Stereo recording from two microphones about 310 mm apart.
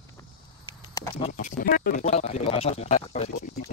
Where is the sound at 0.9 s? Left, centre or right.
Centre.